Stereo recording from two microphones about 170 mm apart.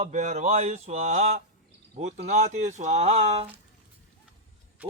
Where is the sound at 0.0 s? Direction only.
45° right (ahead or behind).